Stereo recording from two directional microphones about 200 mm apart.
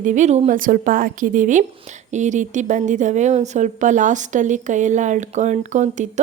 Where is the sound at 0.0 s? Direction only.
40° right (ahead or behind).